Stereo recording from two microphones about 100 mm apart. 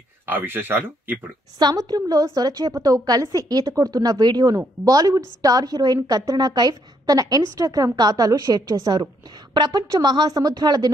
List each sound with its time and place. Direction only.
0.3 s speech: 20° right (ahead or behind)
1.6 s a woman's voice: 45° right (ahead or behind)